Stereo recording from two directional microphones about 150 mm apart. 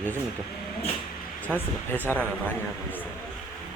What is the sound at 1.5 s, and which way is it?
Speech, centre (ahead or behind).